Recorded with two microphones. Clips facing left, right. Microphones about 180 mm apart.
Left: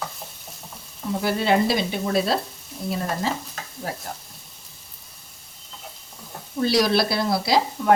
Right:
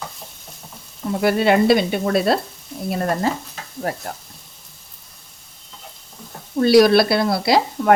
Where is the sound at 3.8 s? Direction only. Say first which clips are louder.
Right 6 dB; 60° right (ahead or behind).